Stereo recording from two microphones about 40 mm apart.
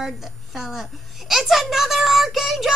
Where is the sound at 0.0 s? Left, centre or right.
Centre.